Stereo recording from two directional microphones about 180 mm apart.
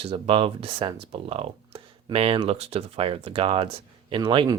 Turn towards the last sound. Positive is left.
turn(degrees=-25)  # may be behind; listen again after turning